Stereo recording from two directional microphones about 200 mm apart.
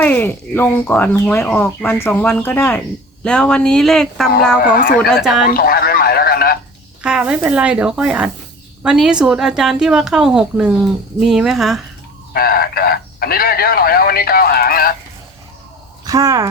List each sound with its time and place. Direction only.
0.0 s a woman's voice: 10° left (ahead or behind)
4.7 s speech: 45° left (ahead or behind)
4.9 s a woman's voice: 5° right (ahead or behind)
5.5 s a sound: 50° left (ahead or behind)
7.0 s a woman's voice: 5° right (ahead or behind)
12.3 s speech: 50° left (ahead or behind)
16.0 s speech: 15° right (ahead or behind)